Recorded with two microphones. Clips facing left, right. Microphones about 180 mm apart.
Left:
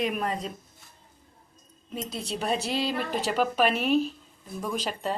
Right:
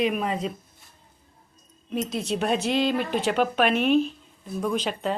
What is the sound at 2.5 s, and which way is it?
Speech, 35° left (ahead or behind).